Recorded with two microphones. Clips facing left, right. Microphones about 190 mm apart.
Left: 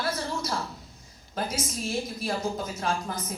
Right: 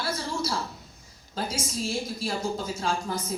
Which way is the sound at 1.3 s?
30° right (ahead or behind).